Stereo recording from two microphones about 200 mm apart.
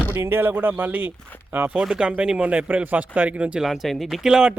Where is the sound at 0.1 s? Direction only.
10° right (ahead or behind).